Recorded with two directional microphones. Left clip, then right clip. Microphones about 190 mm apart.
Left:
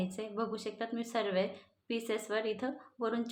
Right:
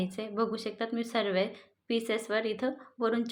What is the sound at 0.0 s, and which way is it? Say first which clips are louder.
Speech: right 5 dB; 30° right (ahead or behind).